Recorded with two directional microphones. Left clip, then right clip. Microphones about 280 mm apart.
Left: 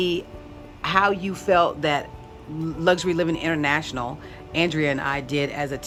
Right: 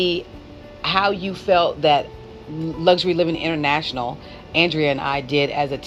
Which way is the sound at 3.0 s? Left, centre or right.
Centre.